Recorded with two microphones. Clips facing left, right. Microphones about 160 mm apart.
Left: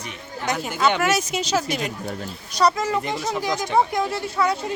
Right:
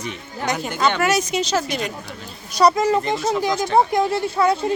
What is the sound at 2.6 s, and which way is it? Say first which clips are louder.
Speech: right 4 dB; 10° right (ahead or behind).